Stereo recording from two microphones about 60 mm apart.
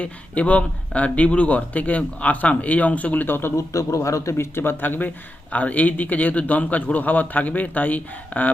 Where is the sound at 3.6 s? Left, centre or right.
Left.